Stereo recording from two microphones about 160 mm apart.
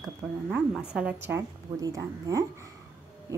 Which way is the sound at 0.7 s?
5° right (ahead or behind).